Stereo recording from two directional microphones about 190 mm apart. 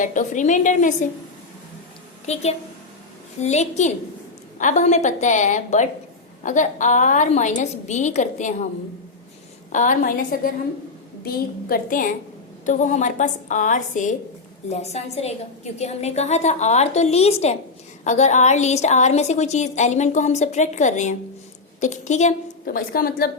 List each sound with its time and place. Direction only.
0.0 s a woman's voice: 40° left (ahead or behind)
2.2 s a woman's voice: 35° left (ahead or behind)
9.7 s a woman's voice: 45° left (ahead or behind)